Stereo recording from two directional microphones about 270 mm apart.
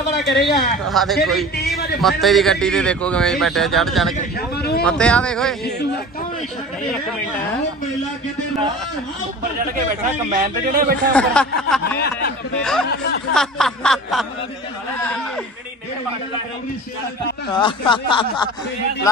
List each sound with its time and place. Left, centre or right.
0.3 s speech: left
0.8 s speech: centre
4.4 s vehicle: left
4.8 s speech: centre
10.3 s a man's voice: right
11.1 s speech: centre
13.3 s speech: centre
17.5 s speech: centre